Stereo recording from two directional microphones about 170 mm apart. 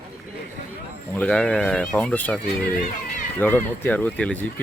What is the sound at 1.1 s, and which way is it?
Speech, 5° left (ahead or behind).